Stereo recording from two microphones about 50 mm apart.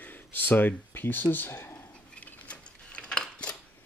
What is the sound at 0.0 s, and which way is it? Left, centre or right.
Speech, left.